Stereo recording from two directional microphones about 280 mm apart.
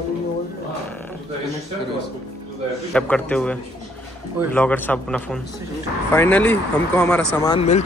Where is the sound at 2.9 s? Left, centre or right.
Centre.